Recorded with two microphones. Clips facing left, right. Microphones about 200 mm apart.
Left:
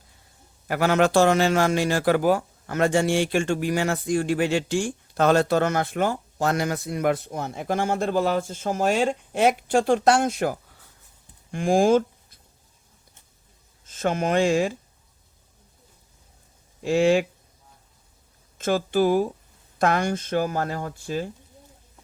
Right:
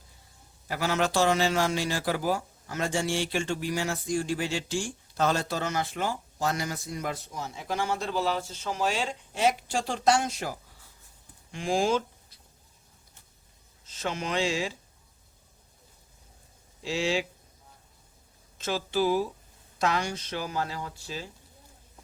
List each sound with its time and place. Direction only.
0.7 s a man's voice: 55° left (ahead or behind)
13.8 s speech: 50° left (ahead or behind)
16.8 s speech: 55° left (ahead or behind)
18.5 s speech: 50° left (ahead or behind)